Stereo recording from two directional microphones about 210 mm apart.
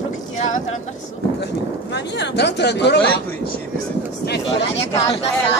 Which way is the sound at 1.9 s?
55° left (ahead or behind).